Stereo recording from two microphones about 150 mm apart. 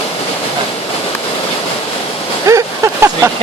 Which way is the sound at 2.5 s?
20° right (ahead or behind).